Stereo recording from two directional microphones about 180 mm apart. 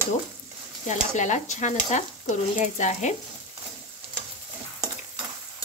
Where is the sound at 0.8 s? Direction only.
40° left (ahead or behind).